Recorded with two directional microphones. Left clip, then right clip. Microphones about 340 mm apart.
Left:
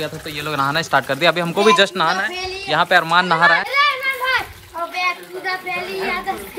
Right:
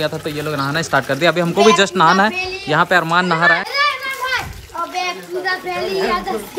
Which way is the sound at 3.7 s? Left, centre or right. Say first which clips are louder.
Left 1 dB; centre.